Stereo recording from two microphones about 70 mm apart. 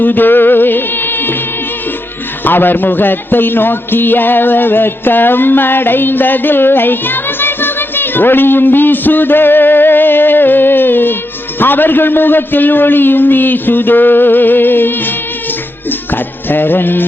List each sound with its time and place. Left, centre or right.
0.0 s music: left
2.4 s a man's voice: left
15.9 s music: left